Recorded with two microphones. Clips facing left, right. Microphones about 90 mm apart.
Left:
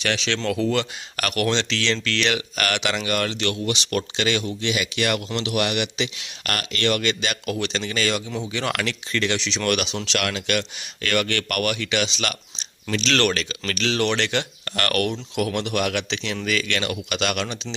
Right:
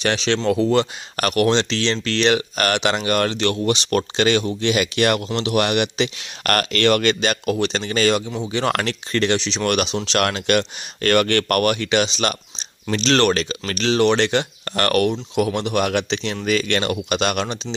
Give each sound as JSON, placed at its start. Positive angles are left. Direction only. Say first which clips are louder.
{"t": 0.0, "sound": "speech", "louder": "right 5 dB", "side_deg": -35}
{"t": 5.3, "sound": "speech", "louder": "right 4 dB", "side_deg": -35}
{"t": 7.4, "sound": "speech", "louder": "right 5 dB", "side_deg": -35}